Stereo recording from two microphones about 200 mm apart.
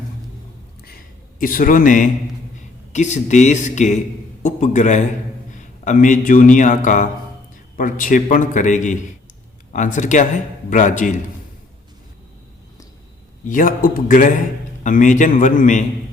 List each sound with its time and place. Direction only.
1.4 s a man's voice: 45° left (ahead or behind)
13.5 s a man's voice: 45° left (ahead or behind)